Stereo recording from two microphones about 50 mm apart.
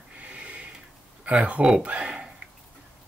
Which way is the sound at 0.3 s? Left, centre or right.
Right.